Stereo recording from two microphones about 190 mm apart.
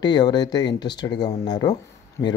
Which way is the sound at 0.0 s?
20° left (ahead or behind).